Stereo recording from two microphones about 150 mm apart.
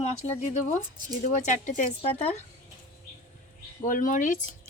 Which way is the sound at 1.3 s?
55° left (ahead or behind).